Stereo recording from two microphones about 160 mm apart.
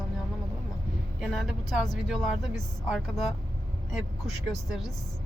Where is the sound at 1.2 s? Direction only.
Centre (ahead or behind).